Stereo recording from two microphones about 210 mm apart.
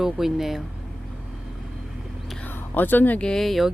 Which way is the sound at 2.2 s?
5° left (ahead or behind).